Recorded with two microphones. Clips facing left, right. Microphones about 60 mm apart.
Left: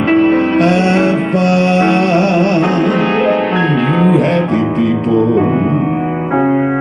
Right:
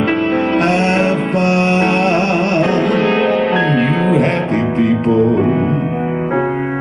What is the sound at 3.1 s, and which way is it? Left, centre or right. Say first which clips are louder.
Music: left 1 dB; left.